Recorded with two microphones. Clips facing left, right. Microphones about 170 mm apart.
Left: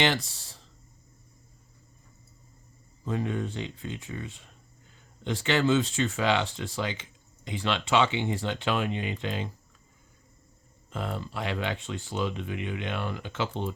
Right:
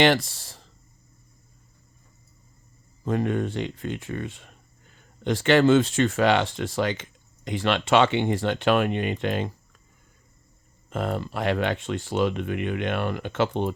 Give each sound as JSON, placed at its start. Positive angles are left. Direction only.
{"t": 0.0, "sound": "speech", "side_deg": -65}
{"t": 3.0, "sound": "speech", "side_deg": -60}
{"t": 10.8, "sound": "speech", "side_deg": -60}